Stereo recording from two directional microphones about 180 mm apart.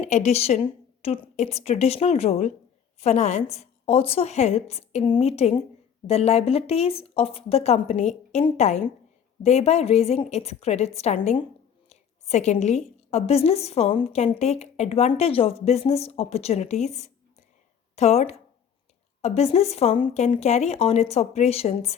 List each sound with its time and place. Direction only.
0.0 s a woman's voice: 40° left (ahead or behind)